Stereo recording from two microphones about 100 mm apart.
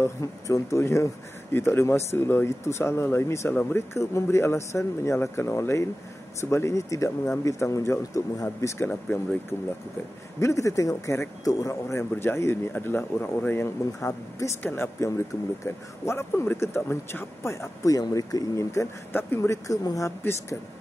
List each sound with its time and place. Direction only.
0.0 s a woman's voice: 30° left (ahead or behind)
13.9 s a woman's voice: 35° left (ahead or behind)
14.6 s speech: 25° left (ahead or behind)